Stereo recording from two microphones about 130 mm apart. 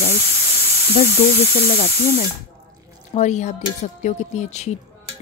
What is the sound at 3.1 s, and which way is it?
A woman's voice, 65° left (ahead or behind).